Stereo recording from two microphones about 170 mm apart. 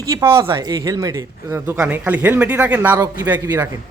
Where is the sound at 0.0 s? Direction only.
20° right (ahead or behind).